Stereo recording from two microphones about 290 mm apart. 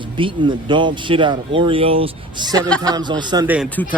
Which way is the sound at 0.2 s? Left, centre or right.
Centre.